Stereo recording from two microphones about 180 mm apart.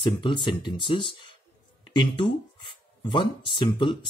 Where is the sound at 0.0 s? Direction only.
25° left (ahead or behind).